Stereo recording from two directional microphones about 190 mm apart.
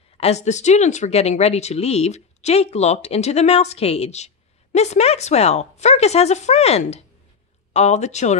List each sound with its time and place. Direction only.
0.2 s speech: 35° left (ahead or behind)